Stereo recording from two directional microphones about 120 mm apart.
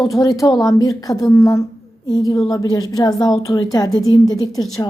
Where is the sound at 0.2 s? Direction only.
30° left (ahead or behind).